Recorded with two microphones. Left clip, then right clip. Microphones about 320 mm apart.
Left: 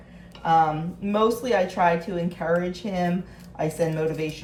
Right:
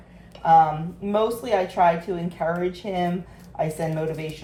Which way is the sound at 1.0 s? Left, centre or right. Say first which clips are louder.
Left 1 dB; centre.